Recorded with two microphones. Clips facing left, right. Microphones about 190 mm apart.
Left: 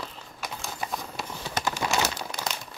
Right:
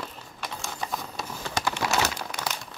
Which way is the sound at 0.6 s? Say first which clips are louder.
Even; 5° left (ahead or behind).